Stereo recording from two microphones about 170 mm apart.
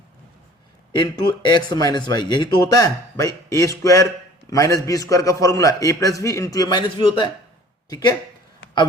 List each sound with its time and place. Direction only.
1.0 s speech: 25° left (ahead or behind)